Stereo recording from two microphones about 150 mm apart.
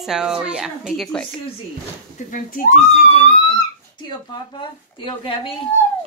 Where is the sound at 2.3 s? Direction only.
65° left (ahead or behind).